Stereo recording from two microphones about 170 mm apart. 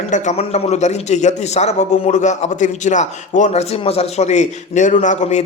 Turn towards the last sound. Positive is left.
turn(degrees=45)  # may be behind; listen again after turning